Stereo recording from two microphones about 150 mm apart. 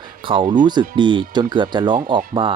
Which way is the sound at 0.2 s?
35° right (ahead or behind).